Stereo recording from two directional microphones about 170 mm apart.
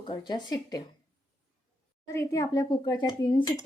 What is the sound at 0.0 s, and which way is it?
Speech, 25° left (ahead or behind).